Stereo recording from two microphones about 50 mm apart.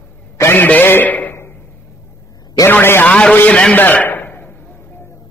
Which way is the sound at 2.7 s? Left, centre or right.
Left.